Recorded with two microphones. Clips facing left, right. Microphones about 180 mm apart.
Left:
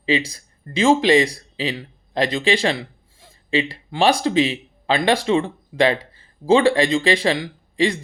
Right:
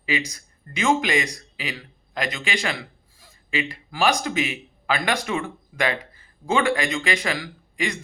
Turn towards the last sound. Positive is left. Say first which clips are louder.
# left 8 dB
turn(degrees=30)  # may be behind; listen again after turning